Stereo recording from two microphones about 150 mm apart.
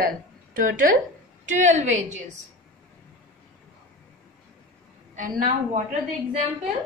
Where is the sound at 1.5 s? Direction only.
55° right (ahead or behind).